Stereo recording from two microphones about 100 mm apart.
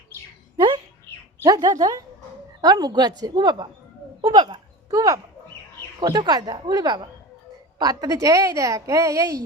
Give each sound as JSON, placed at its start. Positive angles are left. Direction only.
{"t": 1.4, "sound": "a woman's voice", "side_deg": -40}